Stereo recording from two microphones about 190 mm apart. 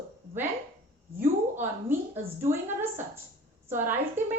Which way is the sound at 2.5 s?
40° right (ahead or behind).